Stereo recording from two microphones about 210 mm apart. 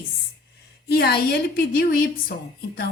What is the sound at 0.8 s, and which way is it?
A woman's voice, 50° left (ahead or behind).